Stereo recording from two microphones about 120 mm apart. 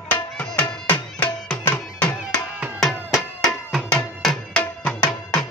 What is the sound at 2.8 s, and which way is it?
Music, centre (ahead or behind).